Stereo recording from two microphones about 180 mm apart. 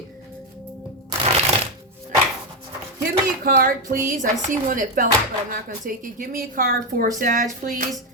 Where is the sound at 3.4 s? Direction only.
50° right (ahead or behind).